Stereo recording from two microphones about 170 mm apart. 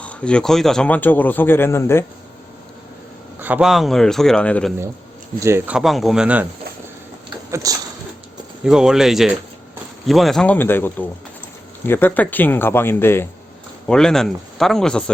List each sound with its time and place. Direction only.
0.0 s speech: 5° left (ahead or behind)
3.4 s a man's voice: 5° right (ahead or behind)
5.4 s speech: 15° right (ahead or behind)
7.5 s speech: 20° right (ahead or behind)
8.6 s a man's voice: 5° right (ahead or behind); by 13.2 s 15° left (ahead or behind)
13.8 s a man's voice: 5° left (ahead or behind)